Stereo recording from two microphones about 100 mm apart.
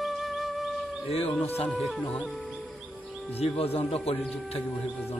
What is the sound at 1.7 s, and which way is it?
Music, centre (ahead or behind).